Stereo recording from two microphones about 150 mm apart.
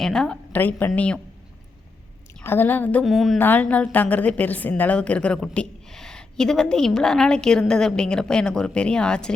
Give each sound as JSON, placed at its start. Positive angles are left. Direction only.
{"t": 0.0, "sound": "a woman's voice", "side_deg": 5}
{"t": 2.4, "sound": "a woman's voice", "side_deg": 15}
{"t": 3.0, "sound": "a woman's voice", "side_deg": 0}
{"t": 3.3, "sound": "a woman's voice", "side_deg": 10}